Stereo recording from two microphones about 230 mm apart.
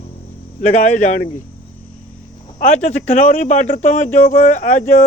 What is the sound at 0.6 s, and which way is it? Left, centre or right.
Speech, left.